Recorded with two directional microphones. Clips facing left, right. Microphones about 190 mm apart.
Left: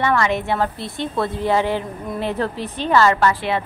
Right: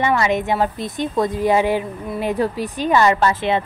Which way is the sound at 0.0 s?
15° right (ahead or behind).